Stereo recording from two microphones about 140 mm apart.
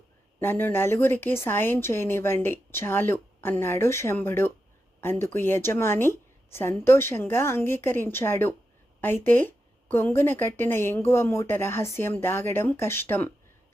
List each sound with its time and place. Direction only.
0.3 s a woman's voice: 15° left (ahead or behind)